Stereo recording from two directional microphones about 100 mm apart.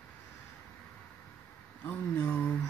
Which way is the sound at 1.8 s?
20° left (ahead or behind).